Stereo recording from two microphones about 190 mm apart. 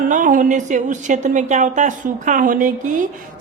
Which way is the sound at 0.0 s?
45° right (ahead or behind).